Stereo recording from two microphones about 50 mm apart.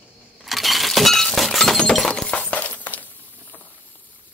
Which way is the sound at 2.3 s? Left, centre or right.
Left.